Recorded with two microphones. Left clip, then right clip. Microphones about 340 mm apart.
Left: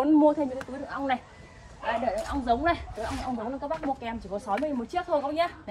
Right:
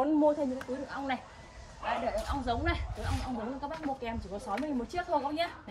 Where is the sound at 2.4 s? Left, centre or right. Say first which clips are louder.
Left 8 dB; centre.